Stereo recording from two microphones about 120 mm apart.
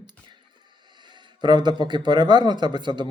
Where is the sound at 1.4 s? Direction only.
40° right (ahead or behind).